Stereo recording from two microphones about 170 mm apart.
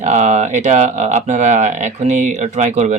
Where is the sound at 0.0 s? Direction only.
45° right (ahead or behind).